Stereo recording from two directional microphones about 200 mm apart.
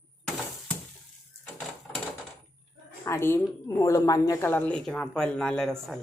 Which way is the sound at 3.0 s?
10° left (ahead or behind).